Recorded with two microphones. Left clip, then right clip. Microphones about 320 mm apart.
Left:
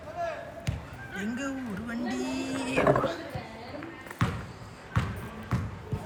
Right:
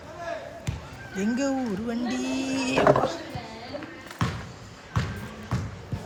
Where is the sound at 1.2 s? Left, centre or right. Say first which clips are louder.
Right 8 dB; centre.